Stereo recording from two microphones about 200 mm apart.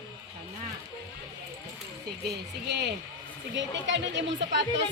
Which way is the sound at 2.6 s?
55° right (ahead or behind).